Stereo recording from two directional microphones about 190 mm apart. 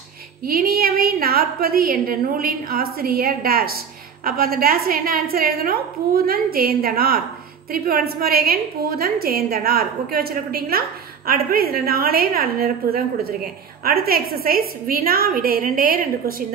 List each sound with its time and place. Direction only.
0.5 s a woman's voice: 50° right (ahead or behind)